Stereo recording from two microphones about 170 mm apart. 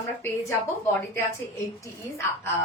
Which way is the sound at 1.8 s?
15° left (ahead or behind).